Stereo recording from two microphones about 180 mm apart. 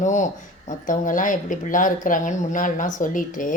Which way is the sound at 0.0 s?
45° left (ahead or behind).